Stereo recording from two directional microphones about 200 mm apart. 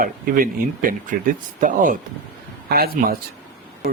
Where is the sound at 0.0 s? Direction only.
45° right (ahead or behind).